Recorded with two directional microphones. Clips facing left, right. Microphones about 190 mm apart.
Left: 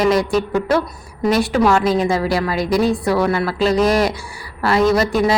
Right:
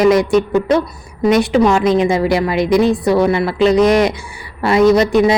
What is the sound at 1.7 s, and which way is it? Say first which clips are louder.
Speech: right 3 dB; 5° left (ahead or behind).